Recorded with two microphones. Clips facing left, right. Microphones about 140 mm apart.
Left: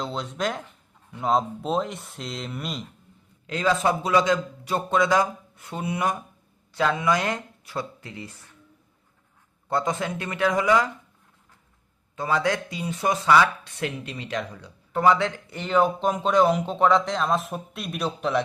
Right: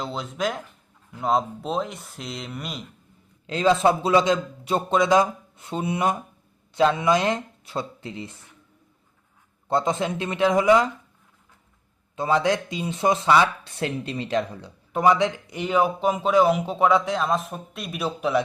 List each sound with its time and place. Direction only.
0.0 s speech: centre (ahead or behind)
3.4 s a man's voice: 25° right (ahead or behind)
9.6 s a man's voice: 25° right (ahead or behind)
12.1 s a man's voice: 25° right (ahead or behind)
14.9 s speech: 15° right (ahead or behind)